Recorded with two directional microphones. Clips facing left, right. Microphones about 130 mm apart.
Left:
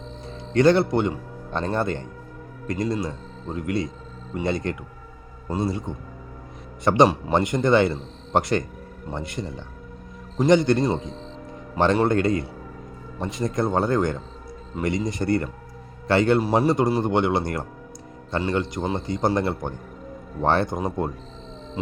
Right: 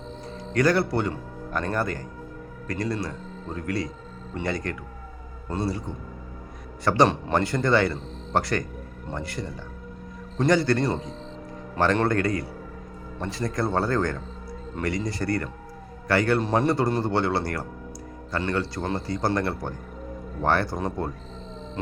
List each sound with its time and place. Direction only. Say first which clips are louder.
0.3 s speech: left 4 dB; 25° left (ahead or behind)
5.5 s speech: left 2 dB; 10° left (ahead or behind)
6.8 s speech: left 3 dB; 20° left (ahead or behind)
16.4 s speech: left 3 dB; 10° left (ahead or behind)